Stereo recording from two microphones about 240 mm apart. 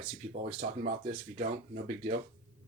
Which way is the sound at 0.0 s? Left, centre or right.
Right.